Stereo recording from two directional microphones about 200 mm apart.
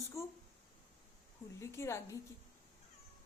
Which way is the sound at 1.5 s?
15° left (ahead or behind).